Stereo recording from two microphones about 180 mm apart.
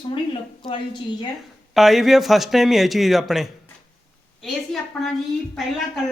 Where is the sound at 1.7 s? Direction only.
Centre (ahead or behind).